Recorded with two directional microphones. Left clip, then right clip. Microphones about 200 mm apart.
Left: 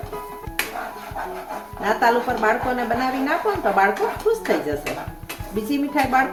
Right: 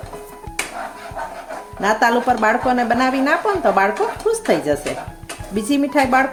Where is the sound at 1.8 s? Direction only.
60° right (ahead or behind).